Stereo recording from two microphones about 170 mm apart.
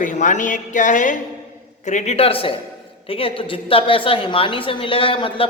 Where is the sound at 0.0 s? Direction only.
50° left (ahead or behind).